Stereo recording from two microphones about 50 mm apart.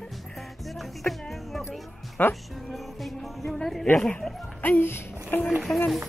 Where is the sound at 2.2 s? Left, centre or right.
Left.